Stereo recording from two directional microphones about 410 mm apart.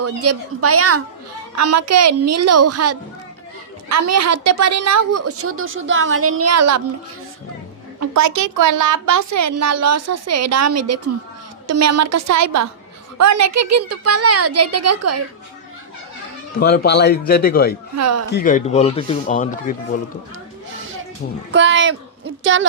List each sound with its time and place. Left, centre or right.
0.0 s a woman's voice: right
7.9 s a woman's voice: right
16.6 s speech: left
17.9 s a woman's voice: right
18.3 s speech: left
21.5 s speech: right